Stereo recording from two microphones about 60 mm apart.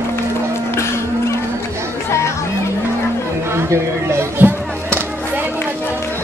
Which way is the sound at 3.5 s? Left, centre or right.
Right.